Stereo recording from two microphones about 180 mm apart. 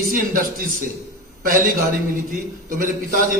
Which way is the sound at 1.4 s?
50° right (ahead or behind).